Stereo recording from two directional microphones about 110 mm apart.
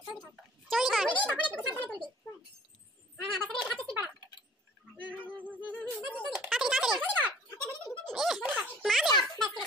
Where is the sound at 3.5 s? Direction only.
Centre (ahead or behind).